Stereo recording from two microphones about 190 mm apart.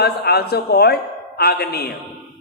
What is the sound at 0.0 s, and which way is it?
A man's voice, 55° left (ahead or behind).